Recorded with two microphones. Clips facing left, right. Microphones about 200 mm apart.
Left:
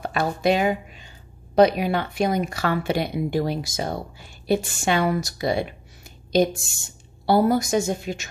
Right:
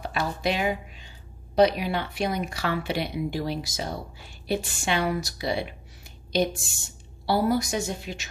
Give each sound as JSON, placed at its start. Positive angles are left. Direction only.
{"t": 0.0, "sound": "speech", "side_deg": 50}
{"t": 7.2, "sound": "speech", "side_deg": 50}